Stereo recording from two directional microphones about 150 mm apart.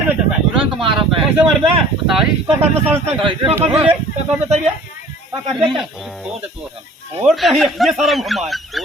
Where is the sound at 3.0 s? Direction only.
35° right (ahead or behind).